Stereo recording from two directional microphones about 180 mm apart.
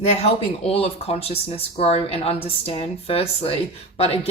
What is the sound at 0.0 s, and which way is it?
Speech, 35° left (ahead or behind).